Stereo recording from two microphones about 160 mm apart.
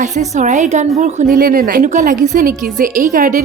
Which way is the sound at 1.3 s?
60° right (ahead or behind).